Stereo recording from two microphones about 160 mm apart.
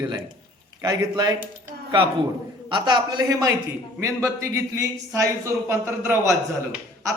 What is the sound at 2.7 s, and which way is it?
A man's voice, 30° right (ahead or behind).